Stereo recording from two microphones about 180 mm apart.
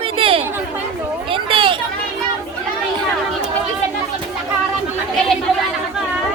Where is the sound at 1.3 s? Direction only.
30° right (ahead or behind).